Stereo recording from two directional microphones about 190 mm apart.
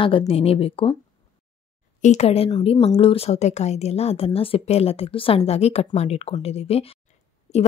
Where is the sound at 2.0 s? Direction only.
35° left (ahead or behind).